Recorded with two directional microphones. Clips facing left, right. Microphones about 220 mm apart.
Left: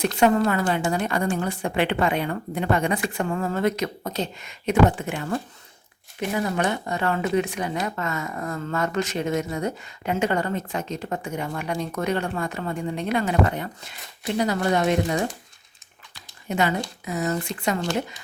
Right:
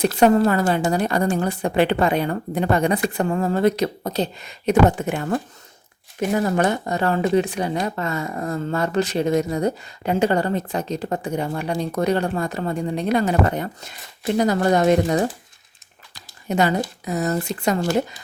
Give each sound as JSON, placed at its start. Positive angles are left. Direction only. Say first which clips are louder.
{"t": 0.2, "sound": "speech", "louder": "right 4 dB", "side_deg": -35}
{"t": 16.1, "sound": "a sound", "louder": "right 4 dB", "side_deg": -40}
{"t": 17.1, "sound": "speech", "louder": "right 2 dB", "side_deg": -40}